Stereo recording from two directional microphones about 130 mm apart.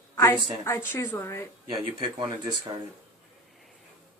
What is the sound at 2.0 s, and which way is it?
Speech, 40° right (ahead or behind).